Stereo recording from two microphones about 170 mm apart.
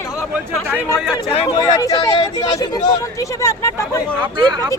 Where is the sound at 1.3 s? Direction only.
30° left (ahead or behind); by 4.0 s 15° left (ahead or behind).